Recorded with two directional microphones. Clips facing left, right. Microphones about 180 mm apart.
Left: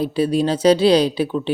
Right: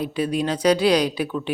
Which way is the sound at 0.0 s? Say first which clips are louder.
Left 5 dB; 30° left (ahead or behind).